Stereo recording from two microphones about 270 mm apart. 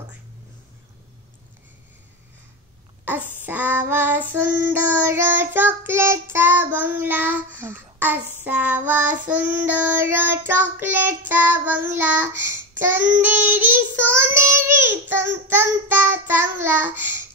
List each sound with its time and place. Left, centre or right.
3.2 s child singing: right
3.4 s child singing: centre